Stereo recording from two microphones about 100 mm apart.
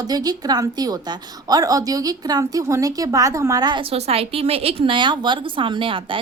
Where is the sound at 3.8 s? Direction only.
85° right.